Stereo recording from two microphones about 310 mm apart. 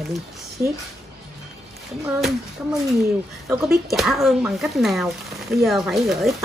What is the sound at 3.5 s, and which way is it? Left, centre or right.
Speech, centre.